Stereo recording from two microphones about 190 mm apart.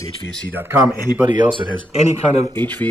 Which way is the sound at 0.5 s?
15° right (ahead or behind).